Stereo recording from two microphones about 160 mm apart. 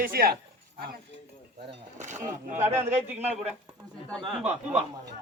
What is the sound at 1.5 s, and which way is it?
Speech, 50° right (ahead or behind).